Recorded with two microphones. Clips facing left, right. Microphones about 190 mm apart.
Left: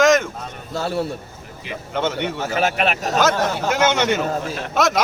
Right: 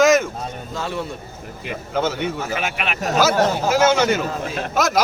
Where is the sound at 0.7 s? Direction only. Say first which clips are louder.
Left 5 dB; 40° left (ahead or behind).